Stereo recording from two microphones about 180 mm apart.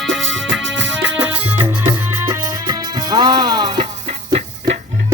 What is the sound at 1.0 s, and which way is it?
Music, 10° right (ahead or behind).